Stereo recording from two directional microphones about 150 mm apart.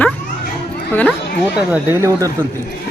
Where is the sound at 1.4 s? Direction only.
10° right (ahead or behind).